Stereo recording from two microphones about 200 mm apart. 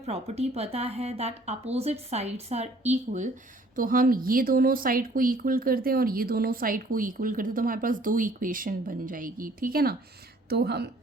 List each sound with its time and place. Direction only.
0.0 s a woman's voice: 30° right (ahead or behind); by 10.9 s 55° right (ahead or behind)